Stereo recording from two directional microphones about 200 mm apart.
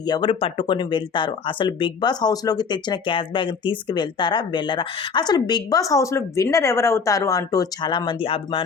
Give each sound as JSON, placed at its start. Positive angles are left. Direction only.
{"t": 0.1, "sound": "a woman's voice", "side_deg": 25}